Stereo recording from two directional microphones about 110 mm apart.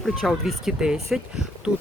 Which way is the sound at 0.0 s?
Centre (ahead or behind).